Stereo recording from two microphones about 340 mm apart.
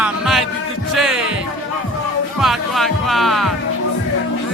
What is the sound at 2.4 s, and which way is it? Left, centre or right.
Speech, centre.